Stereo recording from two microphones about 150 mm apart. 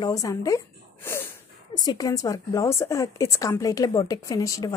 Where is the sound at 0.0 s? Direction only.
25° left (ahead or behind).